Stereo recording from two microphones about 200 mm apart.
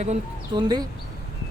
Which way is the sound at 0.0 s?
35° right (ahead or behind).